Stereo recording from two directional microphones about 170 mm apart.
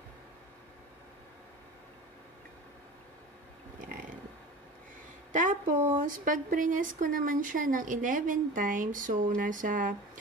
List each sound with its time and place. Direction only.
5.3 s speech: 50° right (ahead or behind)